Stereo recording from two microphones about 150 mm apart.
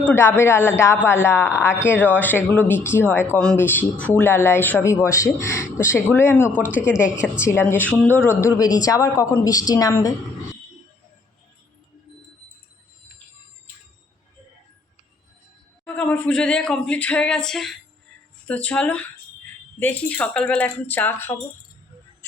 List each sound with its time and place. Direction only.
0.0 s a woman's voice: 15° left (ahead or behind)
15.8 s speech: 10° left (ahead or behind)